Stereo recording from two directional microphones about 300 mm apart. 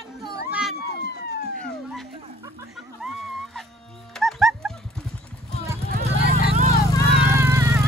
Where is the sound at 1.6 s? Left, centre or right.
Centre.